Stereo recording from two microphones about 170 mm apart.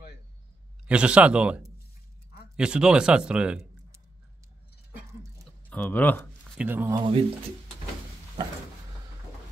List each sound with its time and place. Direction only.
0.8 s speech: 5° right (ahead or behind)
5.4 s a sound: 5° left (ahead or behind)
6.6 s speech: 10° right (ahead or behind)
7.0 s speech: 35° right (ahead or behind)